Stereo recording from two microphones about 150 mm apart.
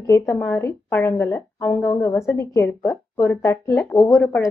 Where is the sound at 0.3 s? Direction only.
15° left (ahead or behind).